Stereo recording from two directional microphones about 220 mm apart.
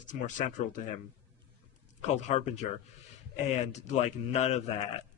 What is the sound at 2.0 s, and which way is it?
A man's voice, 30° left (ahead or behind).